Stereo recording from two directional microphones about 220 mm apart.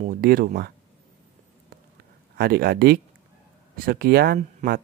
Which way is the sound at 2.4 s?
45° right (ahead or behind).